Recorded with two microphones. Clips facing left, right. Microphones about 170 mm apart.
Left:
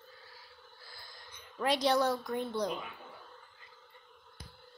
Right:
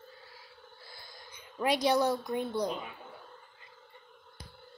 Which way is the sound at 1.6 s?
15° right (ahead or behind).